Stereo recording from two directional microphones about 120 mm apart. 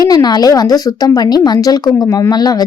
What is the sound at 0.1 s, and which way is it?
Speech, 35° left (ahead or behind).